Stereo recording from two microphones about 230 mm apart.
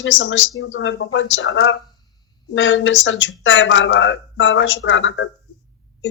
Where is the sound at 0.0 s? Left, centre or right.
Left.